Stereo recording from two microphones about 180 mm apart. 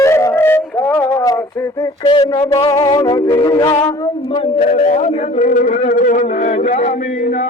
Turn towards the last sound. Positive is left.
turn(degrees=50)  # may be behind; listen again after turning